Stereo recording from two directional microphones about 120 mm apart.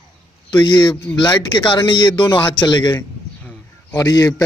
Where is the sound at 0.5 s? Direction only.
40° left (ahead or behind).